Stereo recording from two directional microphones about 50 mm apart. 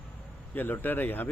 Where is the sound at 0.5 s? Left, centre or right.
Left.